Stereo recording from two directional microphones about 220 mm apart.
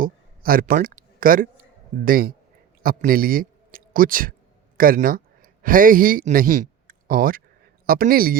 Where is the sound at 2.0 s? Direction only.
40° right (ahead or behind).